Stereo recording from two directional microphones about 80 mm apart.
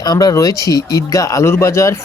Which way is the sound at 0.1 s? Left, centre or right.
Left.